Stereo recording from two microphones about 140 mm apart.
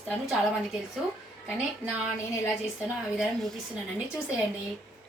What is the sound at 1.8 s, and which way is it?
Speech, 10° right (ahead or behind).